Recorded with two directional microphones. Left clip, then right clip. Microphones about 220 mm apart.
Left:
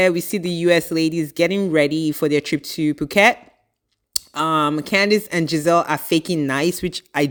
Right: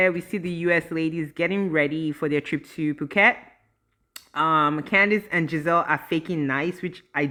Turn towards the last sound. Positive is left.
turn(degrees=40)  # may be behind; listen again after turning